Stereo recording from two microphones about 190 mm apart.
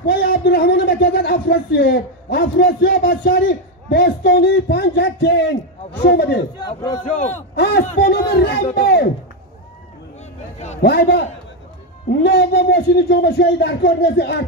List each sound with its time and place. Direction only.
0.0 s a man's voice: 55° left (ahead or behind)
6.6 s speech: 20° left (ahead or behind)
7.0 s a man's voice: 40° left (ahead or behind)
7.5 s a man's voice: 60° left (ahead or behind)
7.8 s a man's voice: 50° left (ahead or behind)
10.8 s a man's voice: 60° left (ahead or behind)